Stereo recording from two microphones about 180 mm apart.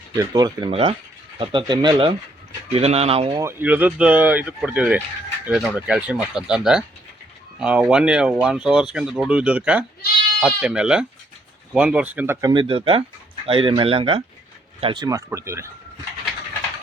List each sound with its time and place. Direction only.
0.2 s speech: 20° right (ahead or behind)
3.3 s speech: 10° right (ahead or behind)